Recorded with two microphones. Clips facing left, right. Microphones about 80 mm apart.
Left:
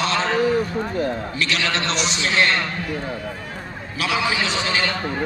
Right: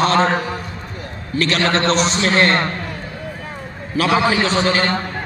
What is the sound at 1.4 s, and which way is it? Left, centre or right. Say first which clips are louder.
A man's voice: right 9 dB; right.